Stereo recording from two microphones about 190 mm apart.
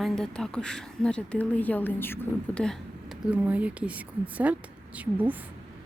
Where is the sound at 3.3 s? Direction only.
5° right (ahead or behind).